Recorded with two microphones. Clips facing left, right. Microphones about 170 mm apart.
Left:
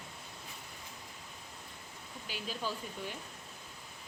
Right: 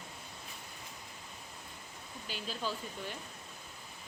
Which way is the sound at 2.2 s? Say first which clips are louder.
Even; 10° left (ahead or behind).